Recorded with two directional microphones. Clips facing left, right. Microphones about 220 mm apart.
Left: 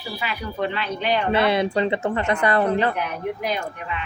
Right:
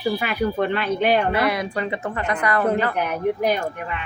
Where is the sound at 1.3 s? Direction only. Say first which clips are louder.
Left 3 dB; 25° left (ahead or behind).